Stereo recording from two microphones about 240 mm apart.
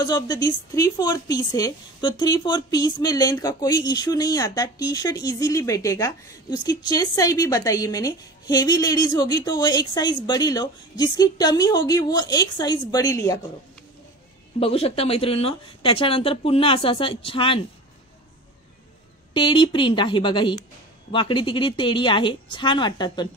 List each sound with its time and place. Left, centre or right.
0.0 s speech: centre
14.6 s speech: left
19.3 s speech: left